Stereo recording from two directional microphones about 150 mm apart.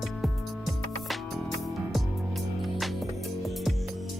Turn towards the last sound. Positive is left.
turn(degrees=0)  # may be behind; listen again after turning